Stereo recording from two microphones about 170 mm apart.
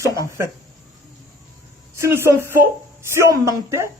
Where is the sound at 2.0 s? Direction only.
15° right (ahead or behind).